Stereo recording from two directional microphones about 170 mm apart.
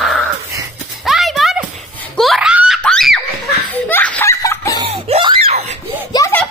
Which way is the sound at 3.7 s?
10° left (ahead or behind).